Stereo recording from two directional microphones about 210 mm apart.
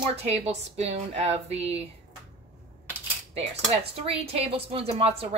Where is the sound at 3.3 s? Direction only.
30° right (ahead or behind).